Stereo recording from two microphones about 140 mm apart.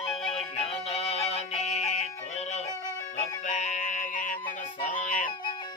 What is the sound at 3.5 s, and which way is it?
Music, 60° left (ahead or behind).